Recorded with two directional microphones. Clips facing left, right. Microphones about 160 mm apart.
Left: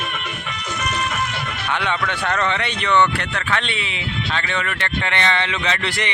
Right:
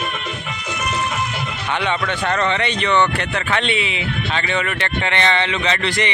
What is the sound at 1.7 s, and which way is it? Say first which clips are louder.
Speech: right 2 dB; 10° right (ahead or behind).